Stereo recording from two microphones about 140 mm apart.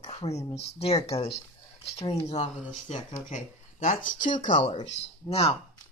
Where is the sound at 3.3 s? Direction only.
60° left (ahead or behind).